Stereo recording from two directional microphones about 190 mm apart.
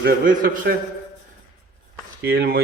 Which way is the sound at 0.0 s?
50° right (ahead or behind).